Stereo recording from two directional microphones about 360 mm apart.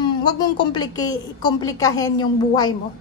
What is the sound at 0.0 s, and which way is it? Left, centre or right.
A woman's voice, centre.